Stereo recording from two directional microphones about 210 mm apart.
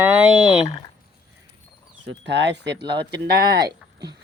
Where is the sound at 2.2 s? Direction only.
55° right (ahead or behind).